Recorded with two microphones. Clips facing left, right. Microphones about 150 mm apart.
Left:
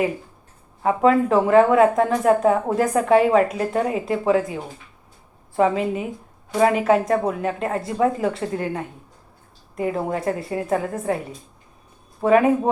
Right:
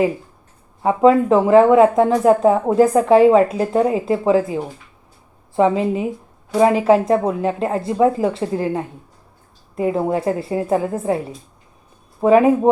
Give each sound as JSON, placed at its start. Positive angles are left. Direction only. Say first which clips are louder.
{"t": 0.8, "sound": "speech", "louder": "right 4 dB", "side_deg": -25}
{"t": 12.2, "sound": "speech", "louder": "right 4 dB", "side_deg": -30}